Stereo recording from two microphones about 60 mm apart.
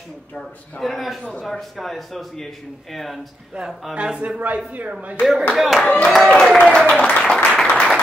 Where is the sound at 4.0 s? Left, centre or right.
Centre.